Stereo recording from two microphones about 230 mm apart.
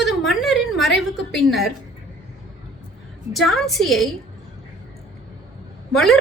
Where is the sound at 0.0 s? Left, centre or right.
Centre.